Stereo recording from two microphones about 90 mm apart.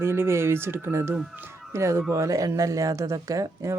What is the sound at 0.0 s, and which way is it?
Speech, 30° right (ahead or behind).